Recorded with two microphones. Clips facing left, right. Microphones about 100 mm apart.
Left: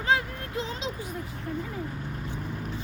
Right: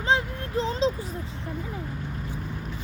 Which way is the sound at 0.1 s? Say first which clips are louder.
Right 2 dB; 35° right (ahead or behind).